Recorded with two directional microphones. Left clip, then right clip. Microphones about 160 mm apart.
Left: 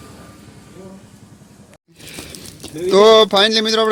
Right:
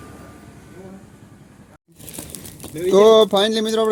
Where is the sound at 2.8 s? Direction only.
10° right (ahead or behind).